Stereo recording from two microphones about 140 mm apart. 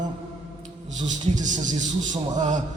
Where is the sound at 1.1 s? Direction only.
60° right (ahead or behind).